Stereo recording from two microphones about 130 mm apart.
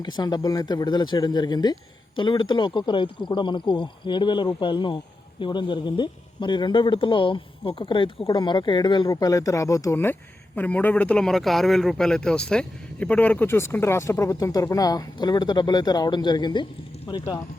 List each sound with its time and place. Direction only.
0.0 s speech: 35° left (ahead or behind)